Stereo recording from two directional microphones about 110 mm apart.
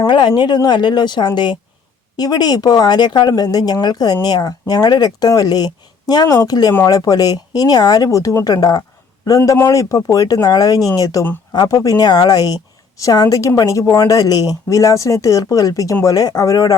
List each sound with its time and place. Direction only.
0.1 s a woman's voice: 45° left (ahead or behind); by 16.7 s 30° left (ahead or behind)